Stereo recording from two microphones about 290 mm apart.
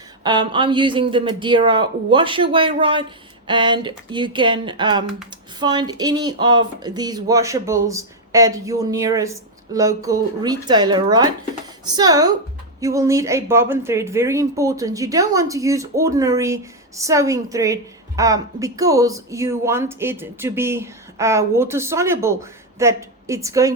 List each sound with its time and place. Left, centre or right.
0.2 s a woman's voice: centre